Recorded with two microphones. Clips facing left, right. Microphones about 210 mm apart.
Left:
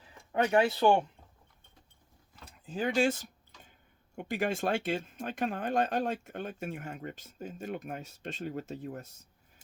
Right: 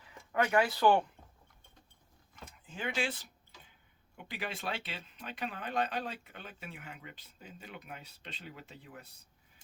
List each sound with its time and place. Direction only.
0.0 s speech: 30° left (ahead or behind)
2.6 s speech: 40° left (ahead or behind)